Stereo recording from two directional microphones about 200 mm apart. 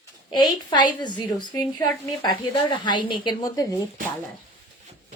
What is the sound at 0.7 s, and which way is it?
A woman's voice, 20° left (ahead or behind).